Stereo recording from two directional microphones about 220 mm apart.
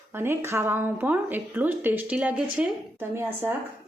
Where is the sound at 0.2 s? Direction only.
10° right (ahead or behind).